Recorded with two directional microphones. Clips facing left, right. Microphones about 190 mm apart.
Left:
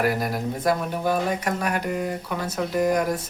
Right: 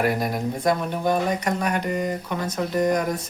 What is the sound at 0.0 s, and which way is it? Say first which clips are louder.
Speech: right 1 dB; centre (ahead or behind).